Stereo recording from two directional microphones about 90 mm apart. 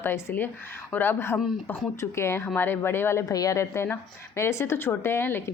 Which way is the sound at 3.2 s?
40° left (ahead or behind).